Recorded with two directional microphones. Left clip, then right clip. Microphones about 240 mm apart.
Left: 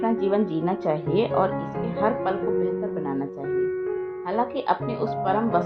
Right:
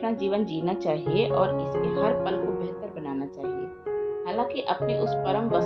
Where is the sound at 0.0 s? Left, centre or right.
Centre.